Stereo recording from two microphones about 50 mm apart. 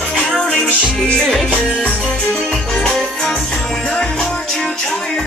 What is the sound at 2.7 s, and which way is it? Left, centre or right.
Music, centre.